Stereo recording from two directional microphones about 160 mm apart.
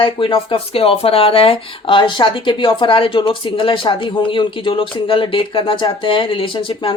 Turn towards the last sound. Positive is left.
turn(degrees=35)  # may be behind; listen again after turning